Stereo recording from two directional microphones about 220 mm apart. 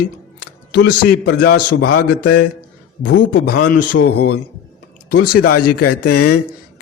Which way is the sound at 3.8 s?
90° left.